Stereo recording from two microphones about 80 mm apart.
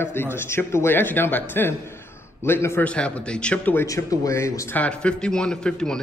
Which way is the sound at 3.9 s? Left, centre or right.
Left.